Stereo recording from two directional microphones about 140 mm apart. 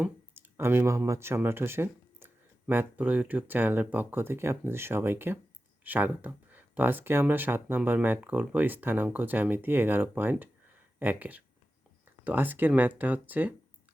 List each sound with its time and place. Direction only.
0.0 s speech: 15° right (ahead or behind)